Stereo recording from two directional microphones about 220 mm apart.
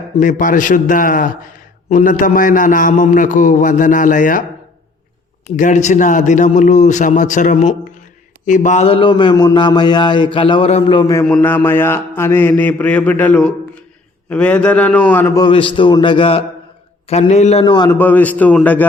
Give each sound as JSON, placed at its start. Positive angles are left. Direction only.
{"t": 0.2, "sound": "a man's voice", "side_deg": 35}
{"t": 5.5, "sound": "a man's voice", "side_deg": 35}
{"t": 11.4, "sound": "mantra", "side_deg": 10}
{"t": 15.4, "sound": "a man's voice", "side_deg": 25}
{"t": 17.9, "sound": "mantra", "side_deg": 10}